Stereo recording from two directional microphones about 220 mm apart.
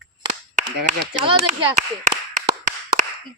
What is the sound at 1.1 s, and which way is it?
Speech, 30° right (ahead or behind).